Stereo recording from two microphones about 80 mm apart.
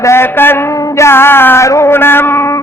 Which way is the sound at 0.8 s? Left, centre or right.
Left.